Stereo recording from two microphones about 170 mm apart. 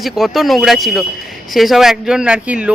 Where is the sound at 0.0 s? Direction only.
Centre (ahead or behind).